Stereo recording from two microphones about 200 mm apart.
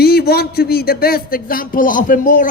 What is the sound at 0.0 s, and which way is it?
Speech, 50° left (ahead or behind).